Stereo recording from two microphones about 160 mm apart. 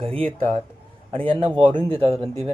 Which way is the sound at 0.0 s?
35° right (ahead or behind).